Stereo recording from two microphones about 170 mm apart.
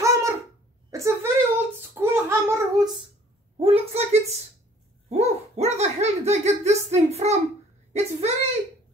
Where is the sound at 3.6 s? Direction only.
35° right (ahead or behind).